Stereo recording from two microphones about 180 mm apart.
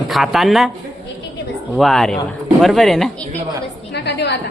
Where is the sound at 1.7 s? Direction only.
Centre (ahead or behind).